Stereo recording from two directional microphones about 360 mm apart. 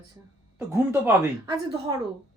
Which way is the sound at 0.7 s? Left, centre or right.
Centre.